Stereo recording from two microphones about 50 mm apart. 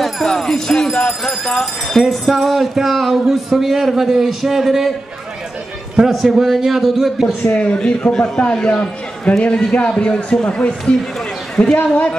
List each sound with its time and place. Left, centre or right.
0.0 s jingle bell: centre
2.0 s speech: centre
5.9 s speech: centre
7.4 s a man's voice: left
11.6 s jingle bell: centre
11.9 s a man's voice: left